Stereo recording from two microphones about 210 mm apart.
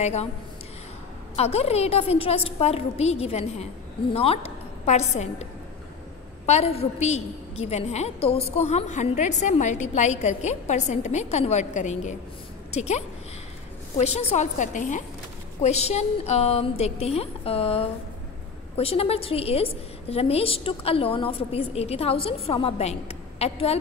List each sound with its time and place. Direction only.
0.0 s a woman's voice: 30° left (ahead or behind)
1.3 s a woman's voice: 30° left (ahead or behind)